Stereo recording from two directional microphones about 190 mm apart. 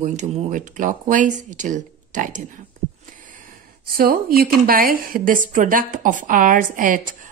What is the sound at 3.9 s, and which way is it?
A woman's voice, 50° right (ahead or behind).